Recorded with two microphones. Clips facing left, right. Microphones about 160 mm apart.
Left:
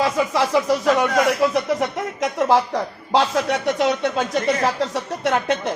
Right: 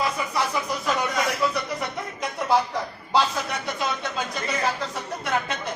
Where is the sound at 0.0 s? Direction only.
90° left; by 1.2 s 75° left (ahead or behind).